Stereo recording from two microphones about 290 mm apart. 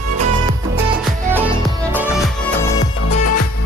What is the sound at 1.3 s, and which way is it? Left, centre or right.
Music, centre.